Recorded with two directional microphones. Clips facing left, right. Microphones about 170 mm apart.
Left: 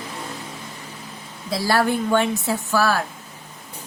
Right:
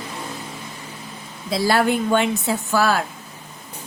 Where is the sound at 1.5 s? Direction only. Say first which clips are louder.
Right 2 dB; 20° right (ahead or behind).